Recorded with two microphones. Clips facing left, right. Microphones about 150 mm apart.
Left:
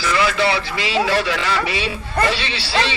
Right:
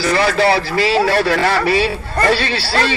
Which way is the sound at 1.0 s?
50° right (ahead or behind).